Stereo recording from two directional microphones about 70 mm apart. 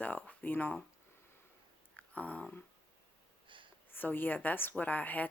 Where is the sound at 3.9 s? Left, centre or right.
Left.